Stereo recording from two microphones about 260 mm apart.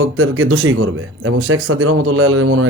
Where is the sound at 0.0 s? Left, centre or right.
Right.